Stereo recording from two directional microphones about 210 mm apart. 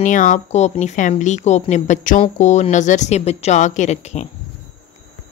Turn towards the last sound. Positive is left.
turn(degrees=30)  # may be behind; listen again after turning